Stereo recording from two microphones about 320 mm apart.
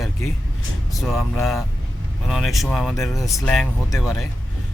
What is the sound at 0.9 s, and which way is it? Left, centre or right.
Speech, centre.